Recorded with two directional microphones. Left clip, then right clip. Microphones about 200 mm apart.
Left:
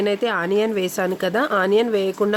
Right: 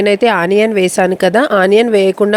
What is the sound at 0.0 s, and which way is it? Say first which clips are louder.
Speech: right 10 dB; 30° right (ahead or behind).